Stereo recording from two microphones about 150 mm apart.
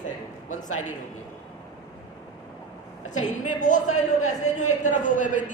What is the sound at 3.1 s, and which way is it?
A man's voice, 55° left (ahead or behind).